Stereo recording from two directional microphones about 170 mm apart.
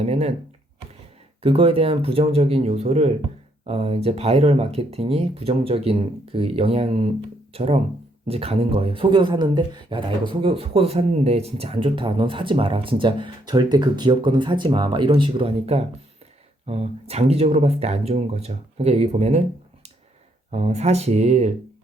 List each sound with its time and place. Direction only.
0.0 s speech: 40° right (ahead or behind)
1.4 s speech: 35° right (ahead or behind)
20.5 s speech: 40° right (ahead or behind)